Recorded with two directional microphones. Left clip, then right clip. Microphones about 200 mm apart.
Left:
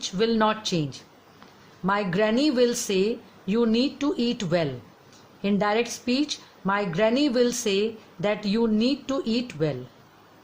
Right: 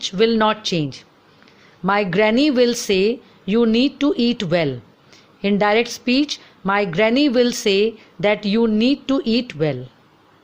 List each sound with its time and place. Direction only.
0.0 s a woman's voice: 25° right (ahead or behind)